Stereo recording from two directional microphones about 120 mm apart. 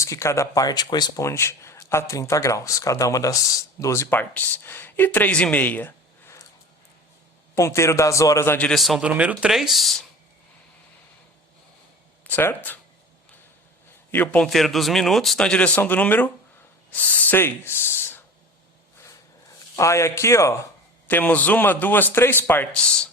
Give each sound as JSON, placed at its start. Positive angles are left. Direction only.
{"t": 0.0, "sound": "speech", "side_deg": 25}
{"t": 7.5, "sound": "speech", "side_deg": 25}
{"t": 8.7, "sound": "speech", "side_deg": 0}
{"t": 12.3, "sound": "a man's voice", "side_deg": 15}
{"t": 14.1, "sound": "a man's voice", "side_deg": 15}
{"t": 14.4, "sound": "speech", "side_deg": 0}
{"t": 19.7, "sound": "a man's voice", "side_deg": 25}